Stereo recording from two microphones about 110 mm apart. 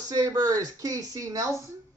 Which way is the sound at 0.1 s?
35° right (ahead or behind).